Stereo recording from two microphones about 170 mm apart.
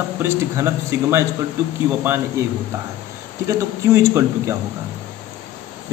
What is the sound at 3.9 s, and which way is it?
Speech, 15° right (ahead or behind).